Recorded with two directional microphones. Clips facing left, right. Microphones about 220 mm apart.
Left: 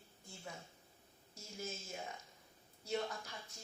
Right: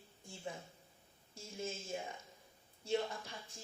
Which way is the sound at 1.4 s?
30° right (ahead or behind).